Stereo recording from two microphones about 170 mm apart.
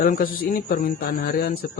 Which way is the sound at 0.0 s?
55° left (ahead or behind).